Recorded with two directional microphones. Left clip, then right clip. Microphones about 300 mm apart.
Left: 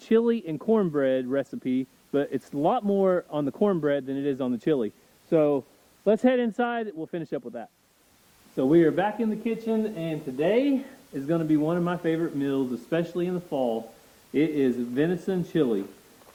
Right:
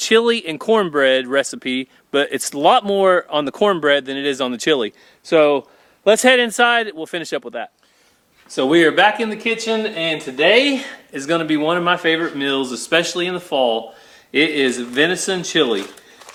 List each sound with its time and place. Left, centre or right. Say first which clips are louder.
0.0 s speech: right 9 dB; centre
8.7 s speech: right 9 dB; centre
13.5 s speech: right 12 dB; right
14.3 s speech: right 8 dB; centre